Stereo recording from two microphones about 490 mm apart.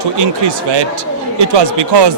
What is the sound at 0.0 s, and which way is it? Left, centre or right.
Speech, right.